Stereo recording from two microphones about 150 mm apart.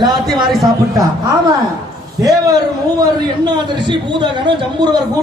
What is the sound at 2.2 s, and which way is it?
A man's voice, 25° right (ahead or behind).